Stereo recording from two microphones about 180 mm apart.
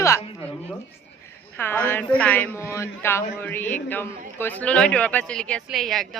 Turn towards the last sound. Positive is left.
turn(degrees=0)  # may be behind; listen again after turning